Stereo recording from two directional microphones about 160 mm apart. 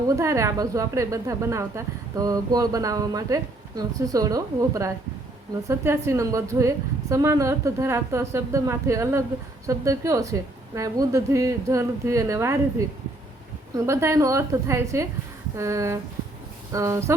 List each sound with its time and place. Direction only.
0.2 s a woman's voice: 20° right (ahead or behind)
13.7 s a woman's voice: 20° right (ahead or behind)